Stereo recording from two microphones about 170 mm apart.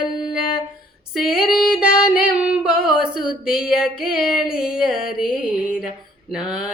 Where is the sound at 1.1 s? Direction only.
Centre (ahead or behind).